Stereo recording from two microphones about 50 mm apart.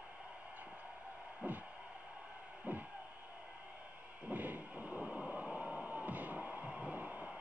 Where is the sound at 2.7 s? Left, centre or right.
Right.